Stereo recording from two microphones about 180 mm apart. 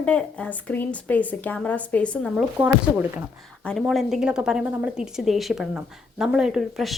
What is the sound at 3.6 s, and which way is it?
A woman's voice, 5° left (ahead or behind).